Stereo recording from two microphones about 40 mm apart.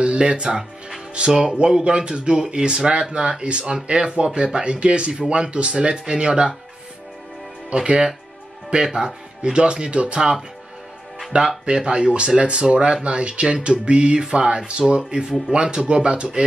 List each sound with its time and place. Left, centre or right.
0.0 s music: right
0.4 s music: centre
1.1 s speech: right
7.7 s speech: right
8.8 s speech: centre
9.4 s speech: right
11.3 s speech: right